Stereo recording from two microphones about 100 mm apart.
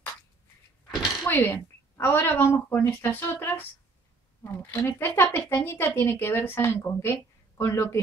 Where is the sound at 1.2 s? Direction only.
25° left (ahead or behind).